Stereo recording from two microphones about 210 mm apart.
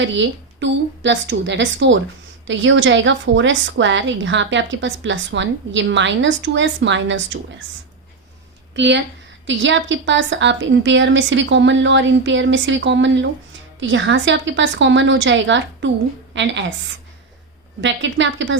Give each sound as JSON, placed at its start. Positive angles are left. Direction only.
{"t": 0.0, "sound": "a woman's voice", "side_deg": -60}
{"t": 8.7, "sound": "a woman's voice", "side_deg": -55}
{"t": 17.7, "sound": "a woman's voice", "side_deg": -60}